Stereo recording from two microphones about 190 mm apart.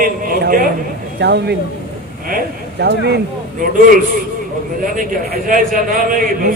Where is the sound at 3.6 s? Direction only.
45° right (ahead or behind).